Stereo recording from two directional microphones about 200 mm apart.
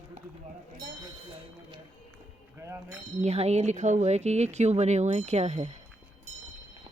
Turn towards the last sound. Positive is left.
turn(degrees=-35)  # may be behind; listen again after turning